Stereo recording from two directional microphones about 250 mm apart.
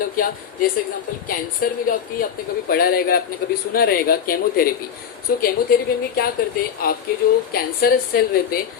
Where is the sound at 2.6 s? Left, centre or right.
Left.